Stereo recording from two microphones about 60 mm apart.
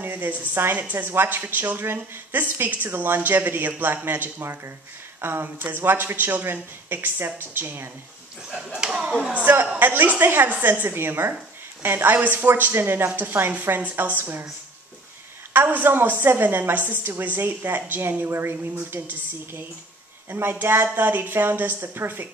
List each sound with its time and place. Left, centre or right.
0.0 s a woman's voice: right
8.7 s speech: centre
9.2 s a woman's voice: right
15.5 s a woman's voice: right